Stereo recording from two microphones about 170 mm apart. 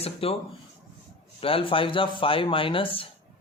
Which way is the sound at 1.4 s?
30° left (ahead or behind).